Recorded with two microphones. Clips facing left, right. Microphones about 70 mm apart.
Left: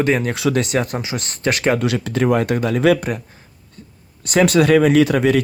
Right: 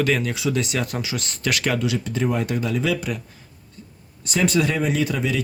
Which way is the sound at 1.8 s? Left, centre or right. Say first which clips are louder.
Left 5 dB; left.